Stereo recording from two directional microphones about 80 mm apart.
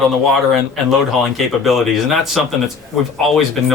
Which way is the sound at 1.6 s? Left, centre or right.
Centre.